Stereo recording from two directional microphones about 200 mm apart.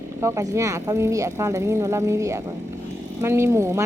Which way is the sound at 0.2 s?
15° right (ahead or behind).